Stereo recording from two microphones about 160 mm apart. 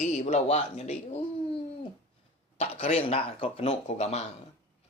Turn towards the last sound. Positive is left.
turn(degrees=45)  # may be behind; listen again after turning